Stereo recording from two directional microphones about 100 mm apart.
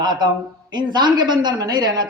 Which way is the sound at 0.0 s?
45° right (ahead or behind).